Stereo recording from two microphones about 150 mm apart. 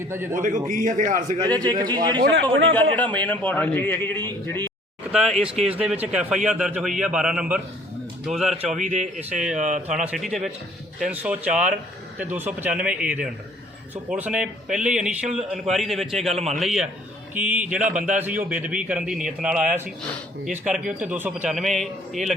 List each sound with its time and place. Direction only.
0.0 s a man's voice: 15° right (ahead or behind)
0.3 s a man's voice: 60° right (ahead or behind)
1.6 s a man's voice: 30° right (ahead or behind)
2.4 s a man's voice: 10° left (ahead or behind)
5.1 s a man's voice: 5° right (ahead or behind)
5.5 s speech: 40° right (ahead or behind)
5.8 s a man's voice: 5° right (ahead or behind)
8.8 s speech: 50° right (ahead or behind)
9.9 s a man's voice: centre (ahead or behind)
16.3 s speech: 45° right (ahead or behind)
16.6 s a man's voice: 5° right (ahead or behind)